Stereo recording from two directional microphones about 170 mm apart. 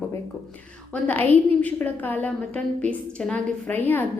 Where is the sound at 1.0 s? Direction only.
10° left (ahead or behind).